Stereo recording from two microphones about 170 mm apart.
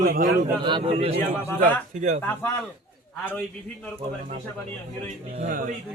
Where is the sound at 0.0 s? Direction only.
55° right (ahead or behind).